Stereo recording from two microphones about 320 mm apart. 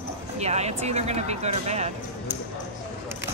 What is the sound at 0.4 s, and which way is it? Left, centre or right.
Speech, centre.